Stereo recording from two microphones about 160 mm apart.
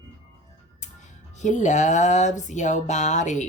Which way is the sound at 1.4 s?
50° left (ahead or behind).